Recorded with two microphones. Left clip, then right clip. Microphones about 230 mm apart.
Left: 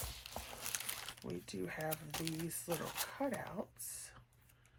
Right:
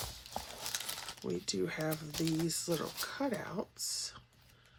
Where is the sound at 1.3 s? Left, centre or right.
Right.